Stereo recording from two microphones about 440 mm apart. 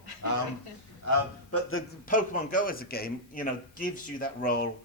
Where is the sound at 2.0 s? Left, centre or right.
Centre.